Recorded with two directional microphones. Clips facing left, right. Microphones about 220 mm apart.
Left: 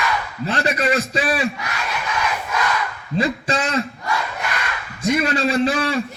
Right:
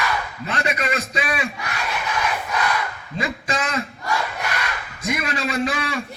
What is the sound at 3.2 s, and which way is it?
Speech, 30° left (ahead or behind).